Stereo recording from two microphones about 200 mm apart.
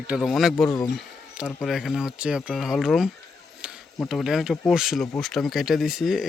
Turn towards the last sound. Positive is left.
turn(degrees=0)  # may be behind; listen again after turning